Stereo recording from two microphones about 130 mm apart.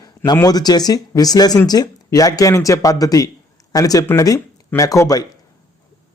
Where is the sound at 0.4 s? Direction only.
30° left (ahead or behind).